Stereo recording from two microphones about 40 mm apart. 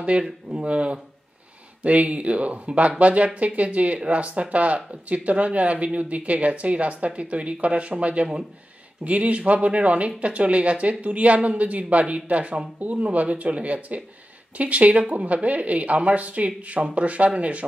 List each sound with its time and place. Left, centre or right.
0.1 s speech: right